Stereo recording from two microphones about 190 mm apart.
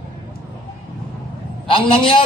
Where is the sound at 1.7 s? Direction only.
30° left (ahead or behind).